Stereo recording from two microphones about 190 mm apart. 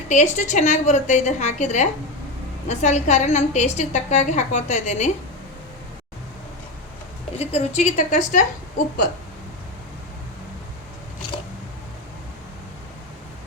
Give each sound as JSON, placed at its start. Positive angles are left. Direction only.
{"t": 0.1, "sound": "a woman's voice", "side_deg": 40}
{"t": 7.3, "sound": "a woman's voice", "side_deg": 35}